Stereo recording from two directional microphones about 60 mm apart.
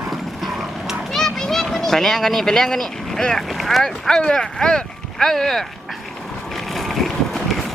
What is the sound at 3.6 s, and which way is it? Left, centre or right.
Speech, centre.